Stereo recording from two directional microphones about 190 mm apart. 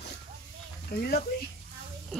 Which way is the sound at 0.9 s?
55° left (ahead or behind).